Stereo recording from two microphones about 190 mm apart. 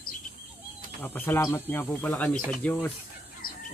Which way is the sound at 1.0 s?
10° left (ahead or behind).